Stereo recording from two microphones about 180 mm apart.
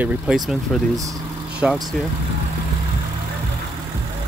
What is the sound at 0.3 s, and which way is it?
Speech, 5° right (ahead or behind).